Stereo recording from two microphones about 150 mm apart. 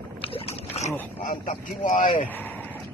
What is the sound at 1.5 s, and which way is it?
Speech, 60° left (ahead or behind).